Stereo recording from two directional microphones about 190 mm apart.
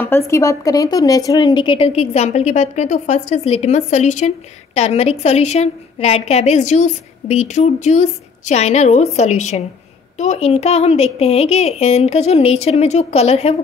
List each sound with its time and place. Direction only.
0.0 s a woman's voice: 15° left (ahead or behind); by 13.6 s 35° left (ahead or behind)